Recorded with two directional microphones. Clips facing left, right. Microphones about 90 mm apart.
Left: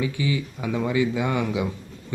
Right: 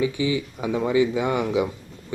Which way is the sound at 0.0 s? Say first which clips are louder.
Right 3 dB; 20° right (ahead or behind).